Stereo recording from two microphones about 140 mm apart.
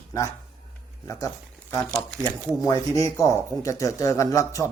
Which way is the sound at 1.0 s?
25° left (ahead or behind).